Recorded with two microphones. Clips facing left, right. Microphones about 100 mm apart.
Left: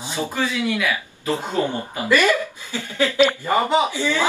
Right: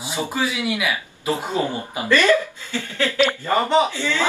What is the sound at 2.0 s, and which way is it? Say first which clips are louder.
Speech: right 1 dB; 15° left (ahead or behind).